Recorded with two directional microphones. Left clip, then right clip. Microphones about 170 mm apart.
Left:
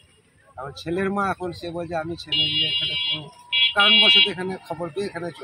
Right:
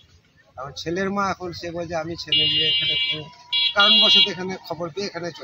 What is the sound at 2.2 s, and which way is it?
Speech, 20° left (ahead or behind).